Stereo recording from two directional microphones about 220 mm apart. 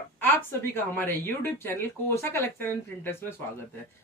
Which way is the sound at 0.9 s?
10° left (ahead or behind).